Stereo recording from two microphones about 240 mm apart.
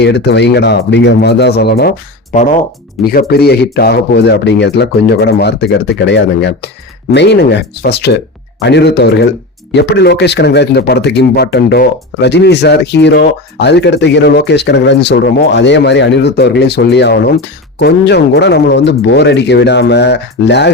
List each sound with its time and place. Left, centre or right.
0.0 s speech: left
2.3 s speech: left